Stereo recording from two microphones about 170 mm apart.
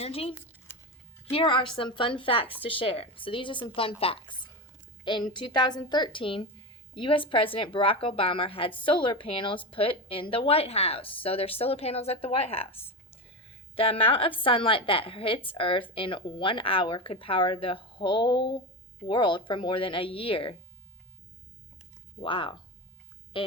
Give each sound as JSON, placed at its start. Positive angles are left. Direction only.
{"t": 0.0, "sound": "a woman's voice", "side_deg": 35}
{"t": 13.7, "sound": "speech", "side_deg": 35}
{"t": 22.2, "sound": "a woman's voice", "side_deg": 30}